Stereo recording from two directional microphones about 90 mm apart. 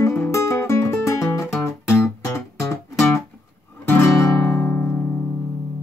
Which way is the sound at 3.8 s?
25° left (ahead or behind).